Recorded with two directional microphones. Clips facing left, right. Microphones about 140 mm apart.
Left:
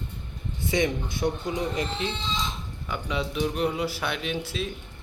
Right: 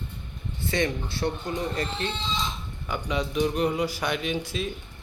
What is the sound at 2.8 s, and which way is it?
Speech, centre (ahead or behind).